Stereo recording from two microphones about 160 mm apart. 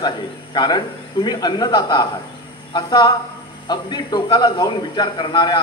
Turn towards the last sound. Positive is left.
turn(degrees=30)  # may be behind; listen again after turning